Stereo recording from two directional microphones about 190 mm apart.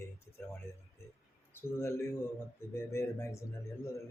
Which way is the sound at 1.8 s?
15° left (ahead or behind).